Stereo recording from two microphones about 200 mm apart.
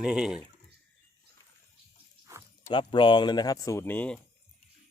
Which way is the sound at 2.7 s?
25° left (ahead or behind).